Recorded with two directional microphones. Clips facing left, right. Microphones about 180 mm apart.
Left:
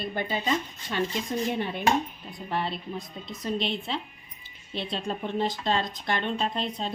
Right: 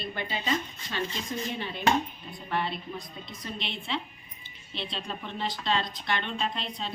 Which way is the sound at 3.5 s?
40° left (ahead or behind).